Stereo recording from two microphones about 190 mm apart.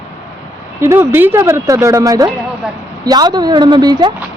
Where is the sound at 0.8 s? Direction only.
10° right (ahead or behind).